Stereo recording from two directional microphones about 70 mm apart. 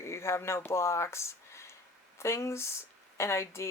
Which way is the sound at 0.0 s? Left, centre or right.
Left.